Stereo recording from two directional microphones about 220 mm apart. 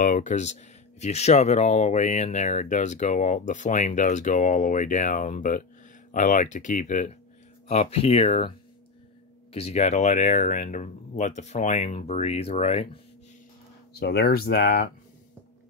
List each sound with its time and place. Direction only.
0.0 s speech: 35° left (ahead or behind)
13.9 s speech: 45° left (ahead or behind)